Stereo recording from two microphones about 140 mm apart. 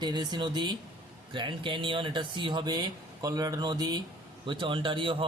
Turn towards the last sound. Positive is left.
turn(degrees=-35)  # may be behind; listen again after turning